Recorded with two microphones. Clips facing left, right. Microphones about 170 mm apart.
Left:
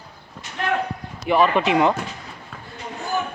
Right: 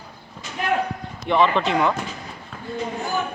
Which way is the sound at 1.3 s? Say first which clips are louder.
Left 1 dB; 10° left (ahead or behind).